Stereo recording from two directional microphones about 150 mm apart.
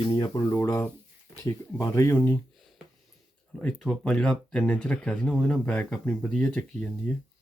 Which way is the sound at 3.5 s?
5° left (ahead or behind).